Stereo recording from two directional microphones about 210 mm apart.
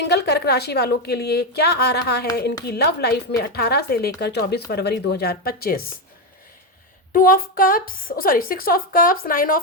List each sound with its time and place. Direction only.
0.0 s speech: 50° left (ahead or behind)
7.1 s speech: 45° left (ahead or behind)